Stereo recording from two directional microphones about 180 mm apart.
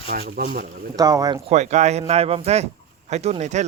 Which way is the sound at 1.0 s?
20° right (ahead or behind).